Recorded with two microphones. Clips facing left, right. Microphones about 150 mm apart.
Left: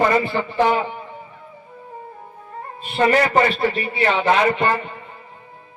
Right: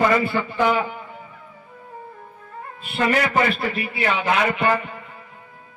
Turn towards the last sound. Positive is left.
turn(degrees=30)  # may be behind; listen again after turning